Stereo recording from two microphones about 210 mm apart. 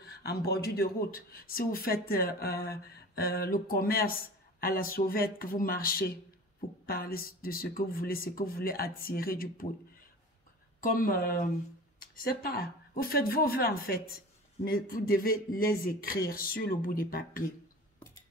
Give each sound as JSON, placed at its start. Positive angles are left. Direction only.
{"t": 0.0, "sound": "speech", "side_deg": 50}
{"t": 10.8, "sound": "speech", "side_deg": 40}